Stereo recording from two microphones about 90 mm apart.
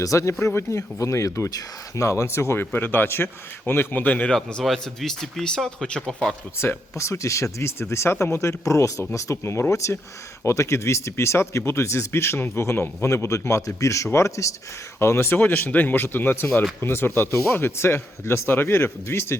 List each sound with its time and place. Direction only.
0.0 s a man's voice: 35° left (ahead or behind); by 6.1 s 5° left (ahead or behind)
6.6 s a man's voice: 30° left (ahead or behind)